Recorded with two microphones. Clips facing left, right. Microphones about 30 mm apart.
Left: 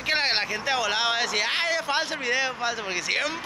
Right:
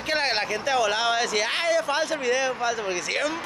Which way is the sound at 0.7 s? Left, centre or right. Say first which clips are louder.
Right 3 dB; left.